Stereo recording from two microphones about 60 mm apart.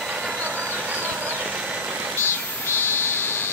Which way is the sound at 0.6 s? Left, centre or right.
Right.